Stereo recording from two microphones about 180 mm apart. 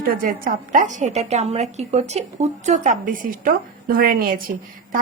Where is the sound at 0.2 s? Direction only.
50° right (ahead or behind).